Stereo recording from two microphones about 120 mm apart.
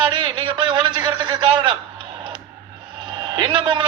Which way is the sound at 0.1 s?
40° right (ahead or behind).